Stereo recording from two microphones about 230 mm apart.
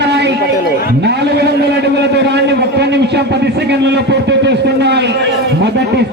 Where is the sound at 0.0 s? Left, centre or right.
Right.